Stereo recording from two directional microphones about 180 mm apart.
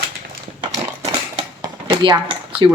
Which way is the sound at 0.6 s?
25° right (ahead or behind).